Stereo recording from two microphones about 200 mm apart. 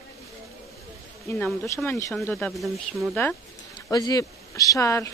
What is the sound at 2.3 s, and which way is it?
Speech, centre (ahead or behind).